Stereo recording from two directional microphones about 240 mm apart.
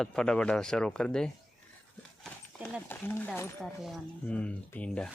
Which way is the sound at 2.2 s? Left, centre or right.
Centre.